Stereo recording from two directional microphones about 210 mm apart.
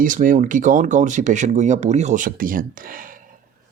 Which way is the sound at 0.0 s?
40° right (ahead or behind).